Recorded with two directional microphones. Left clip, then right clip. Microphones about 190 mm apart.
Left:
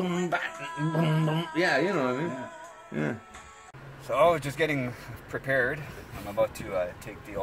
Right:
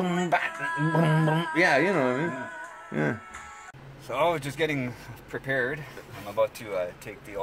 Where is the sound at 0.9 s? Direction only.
30° right (ahead or behind).